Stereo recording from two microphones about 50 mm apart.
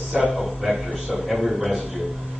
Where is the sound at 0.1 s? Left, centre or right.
Right.